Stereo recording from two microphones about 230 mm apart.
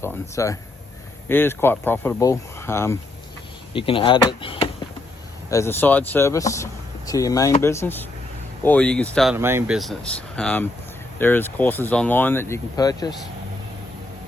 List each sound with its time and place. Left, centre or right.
0.0 s speech: centre
3.7 s speech: left; by 9.3 s centre
9.3 s speech: centre